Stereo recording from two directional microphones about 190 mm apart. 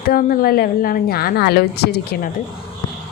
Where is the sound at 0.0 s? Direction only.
50° left (ahead or behind).